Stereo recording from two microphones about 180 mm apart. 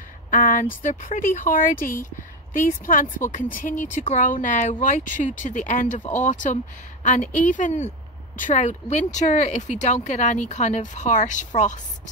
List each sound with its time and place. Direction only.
0.3 s speech: 45° left (ahead or behind)